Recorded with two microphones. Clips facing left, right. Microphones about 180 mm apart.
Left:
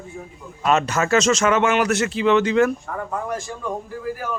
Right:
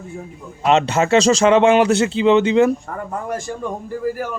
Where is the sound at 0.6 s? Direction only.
25° right (ahead or behind).